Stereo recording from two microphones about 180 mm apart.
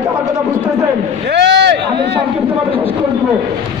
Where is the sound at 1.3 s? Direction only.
65° right (ahead or behind).